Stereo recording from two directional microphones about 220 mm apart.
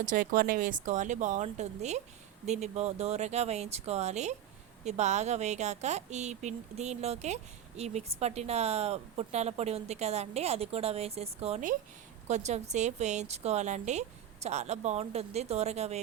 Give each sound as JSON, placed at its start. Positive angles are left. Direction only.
{"t": 0.0, "sound": "speech", "side_deg": -40}